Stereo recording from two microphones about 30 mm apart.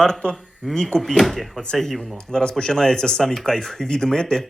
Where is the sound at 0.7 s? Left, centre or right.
Left.